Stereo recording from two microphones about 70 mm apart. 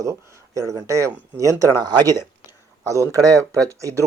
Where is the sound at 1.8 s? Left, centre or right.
Right.